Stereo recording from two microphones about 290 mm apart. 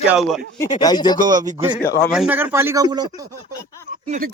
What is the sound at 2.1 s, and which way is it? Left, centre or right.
Speech, centre.